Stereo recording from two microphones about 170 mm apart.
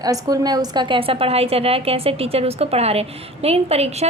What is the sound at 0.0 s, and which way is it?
A woman's voice, 20° right (ahead or behind).